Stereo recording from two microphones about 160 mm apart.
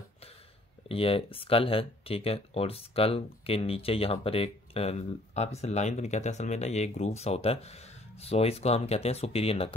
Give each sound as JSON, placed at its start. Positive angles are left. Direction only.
{"t": 0.8, "sound": "speech", "side_deg": 35}